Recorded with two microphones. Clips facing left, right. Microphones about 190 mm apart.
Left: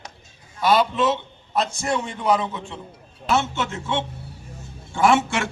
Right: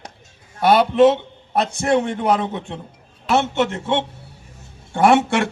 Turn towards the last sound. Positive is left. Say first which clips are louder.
# right 4 dB
turn(degrees=-60)  # may be behind; listen again after turning